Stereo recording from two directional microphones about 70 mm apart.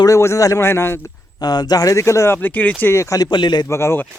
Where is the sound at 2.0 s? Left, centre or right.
Left.